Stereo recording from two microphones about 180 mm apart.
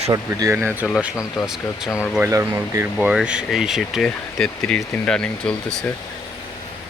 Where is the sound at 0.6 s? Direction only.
5° left (ahead or behind).